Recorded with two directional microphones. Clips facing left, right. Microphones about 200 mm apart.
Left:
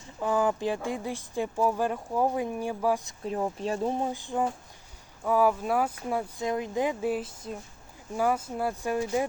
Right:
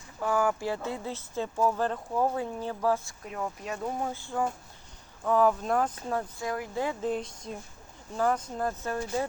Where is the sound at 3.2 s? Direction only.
30° left (ahead or behind); by 6.2 s 10° left (ahead or behind).